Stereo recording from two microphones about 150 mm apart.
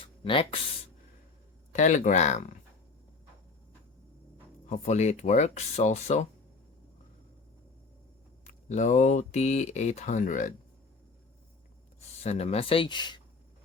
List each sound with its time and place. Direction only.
0.0 s a sound: 35° left (ahead or behind)
1.7 s speech: 55° left (ahead or behind)
4.6 s speech: 50° left (ahead or behind)
8.4 s speech: 55° left (ahead or behind)
12.2 s speech: 45° left (ahead or behind)